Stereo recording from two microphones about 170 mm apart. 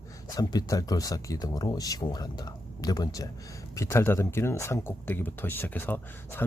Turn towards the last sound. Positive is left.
turn(degrees=10)  # may be behind; listen again after turning